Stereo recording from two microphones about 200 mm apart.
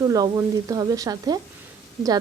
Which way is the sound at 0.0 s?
15° right (ahead or behind).